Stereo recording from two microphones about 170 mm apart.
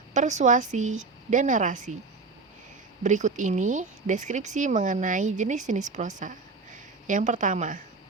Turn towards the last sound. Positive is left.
turn(degrees=-50)  # may be behind; listen again after turning